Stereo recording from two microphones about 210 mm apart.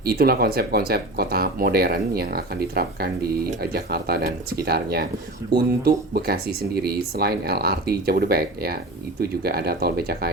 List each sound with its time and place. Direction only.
0.0 s speech: 50° right (ahead or behind)